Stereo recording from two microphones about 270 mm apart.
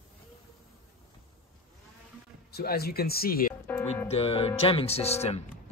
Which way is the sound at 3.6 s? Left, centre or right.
Centre.